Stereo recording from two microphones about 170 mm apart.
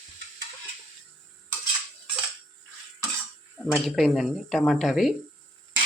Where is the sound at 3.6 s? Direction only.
Centre (ahead or behind).